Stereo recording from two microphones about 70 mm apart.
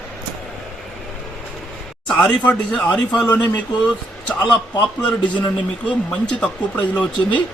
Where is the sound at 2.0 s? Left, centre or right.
Centre.